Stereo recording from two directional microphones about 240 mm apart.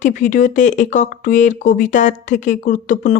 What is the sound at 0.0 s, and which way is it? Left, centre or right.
Speech, left.